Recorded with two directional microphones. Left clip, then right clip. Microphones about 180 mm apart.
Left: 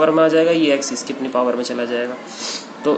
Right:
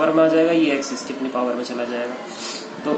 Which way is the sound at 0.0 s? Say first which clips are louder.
Left 2 dB; 65° left (ahead or behind).